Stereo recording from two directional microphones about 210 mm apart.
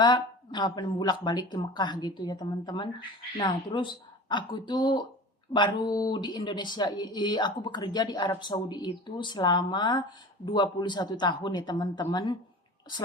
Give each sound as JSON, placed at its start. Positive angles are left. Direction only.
{"t": 0.0, "sound": "speech", "side_deg": 20}